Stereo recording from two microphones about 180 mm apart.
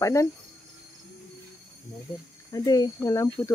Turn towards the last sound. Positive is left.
turn(degrees=20)  # may be behind; listen again after turning